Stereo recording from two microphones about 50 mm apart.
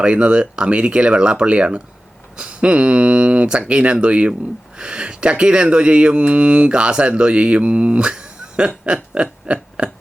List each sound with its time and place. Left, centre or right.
0.0 s speech: right